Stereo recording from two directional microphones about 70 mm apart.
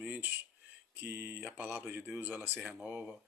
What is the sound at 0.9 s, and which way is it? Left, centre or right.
Speech, right.